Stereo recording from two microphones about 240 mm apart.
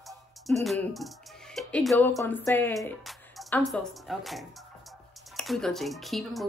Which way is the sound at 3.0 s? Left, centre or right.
Centre.